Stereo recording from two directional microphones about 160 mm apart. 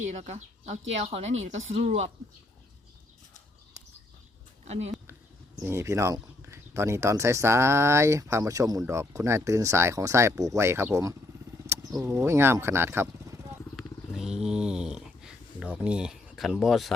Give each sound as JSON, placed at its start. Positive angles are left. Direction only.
{"t": 0.0, "sound": "speech", "side_deg": -50}
{"t": 4.6, "sound": "speech", "side_deg": -45}
{"t": 5.5, "sound": "speech", "side_deg": -15}
{"t": 11.6, "sound": "vehicle", "side_deg": -20}
{"t": 11.9, "sound": "speech", "side_deg": -15}
{"t": 13.7, "sound": "a sound", "side_deg": 0}